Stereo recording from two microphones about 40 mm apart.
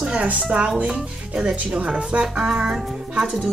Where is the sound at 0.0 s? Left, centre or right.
Right.